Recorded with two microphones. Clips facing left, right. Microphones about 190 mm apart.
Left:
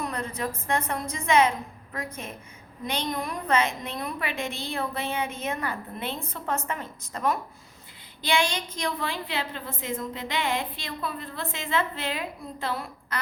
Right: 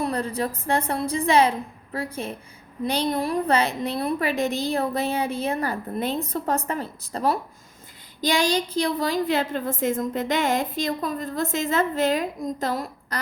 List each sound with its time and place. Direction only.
0.0 s a woman's voice: 35° right (ahead or behind)